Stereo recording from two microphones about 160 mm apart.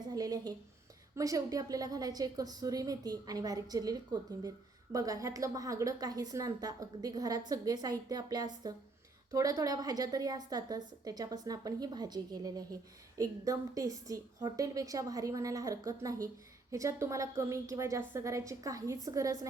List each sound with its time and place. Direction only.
0.1 s a woman's voice: 25° right (ahead or behind)